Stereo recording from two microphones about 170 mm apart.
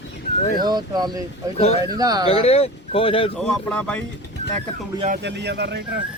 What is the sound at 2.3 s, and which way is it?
Speech, 35° left (ahead or behind).